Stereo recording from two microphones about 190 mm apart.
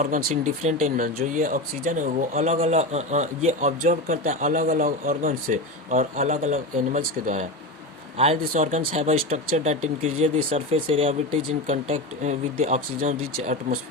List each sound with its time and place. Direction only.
0.0 s speech: 40° right (ahead or behind)